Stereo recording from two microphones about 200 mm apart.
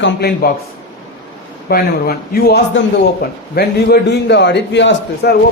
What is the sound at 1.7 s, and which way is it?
A man's voice, 50° left (ahead or behind).